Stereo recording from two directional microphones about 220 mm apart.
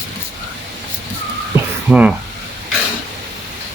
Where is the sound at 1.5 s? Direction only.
10° right (ahead or behind).